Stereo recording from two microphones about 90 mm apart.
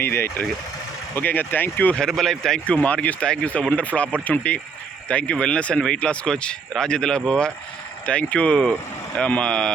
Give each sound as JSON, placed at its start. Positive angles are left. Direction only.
{"t": 0.0, "sound": "speech", "side_deg": 25}
{"t": 2.0, "sound": "speech", "side_deg": 5}